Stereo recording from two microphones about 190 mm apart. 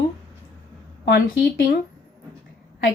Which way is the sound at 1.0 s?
50° left (ahead or behind).